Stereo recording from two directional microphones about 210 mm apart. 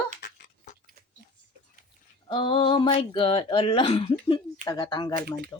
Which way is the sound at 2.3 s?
25° left (ahead or behind).